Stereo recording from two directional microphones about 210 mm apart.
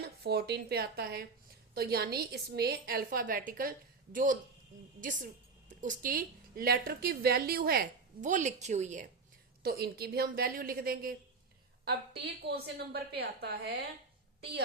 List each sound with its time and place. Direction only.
0.0 s a woman's voice: 50° right (ahead or behind); by 9.0 s 35° right (ahead or behind)
9.6 s a woman's voice: 45° right (ahead or behind)